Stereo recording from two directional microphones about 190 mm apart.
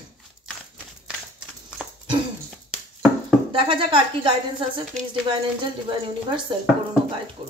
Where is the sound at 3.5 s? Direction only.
25° right (ahead or behind).